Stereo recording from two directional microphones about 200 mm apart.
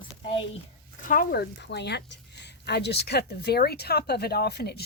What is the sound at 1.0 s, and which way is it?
Speech, 50° left (ahead or behind).